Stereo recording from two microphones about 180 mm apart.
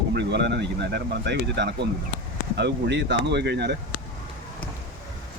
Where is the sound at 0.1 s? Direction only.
70° right (ahead or behind).